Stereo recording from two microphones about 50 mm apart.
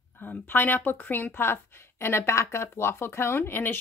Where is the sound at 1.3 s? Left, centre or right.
Left.